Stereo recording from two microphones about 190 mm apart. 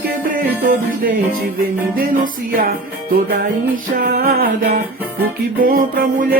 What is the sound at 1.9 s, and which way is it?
Music, 45° right (ahead or behind).